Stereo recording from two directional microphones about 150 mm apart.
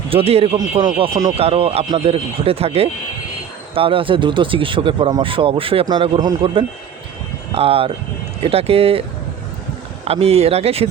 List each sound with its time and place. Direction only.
0.1 s speech: 40° right (ahead or behind)